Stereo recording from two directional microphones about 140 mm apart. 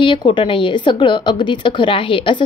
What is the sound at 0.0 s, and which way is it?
Speech, 35° left (ahead or behind).